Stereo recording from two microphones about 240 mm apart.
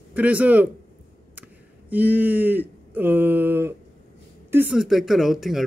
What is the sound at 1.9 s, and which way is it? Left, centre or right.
Speech, centre.